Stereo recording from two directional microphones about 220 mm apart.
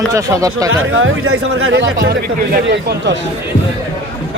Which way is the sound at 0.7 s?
65° right (ahead or behind).